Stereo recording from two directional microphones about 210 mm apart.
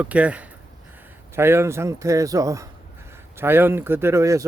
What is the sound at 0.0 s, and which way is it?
Speech, 5° right (ahead or behind).